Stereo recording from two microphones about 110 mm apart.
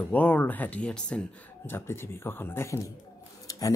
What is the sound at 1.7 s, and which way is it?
Speech, 20° left (ahead or behind).